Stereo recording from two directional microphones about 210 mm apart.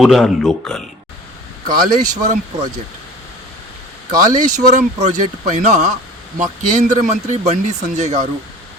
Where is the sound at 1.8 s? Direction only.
35° right (ahead or behind).